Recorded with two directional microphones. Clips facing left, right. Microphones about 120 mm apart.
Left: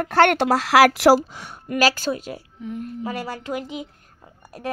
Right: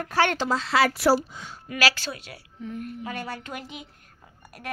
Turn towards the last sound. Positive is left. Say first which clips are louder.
# left 5 dB
turn(degrees=25)  # may be behind; listen again after turning